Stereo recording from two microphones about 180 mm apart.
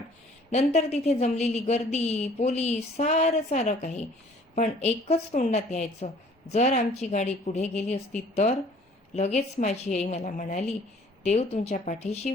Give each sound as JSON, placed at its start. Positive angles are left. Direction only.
{"t": 0.5, "sound": "a woman's voice", "side_deg": 40}